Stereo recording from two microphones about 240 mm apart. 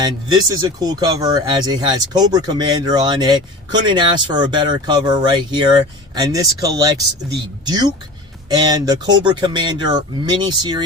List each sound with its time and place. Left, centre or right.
0.0 s speech: centre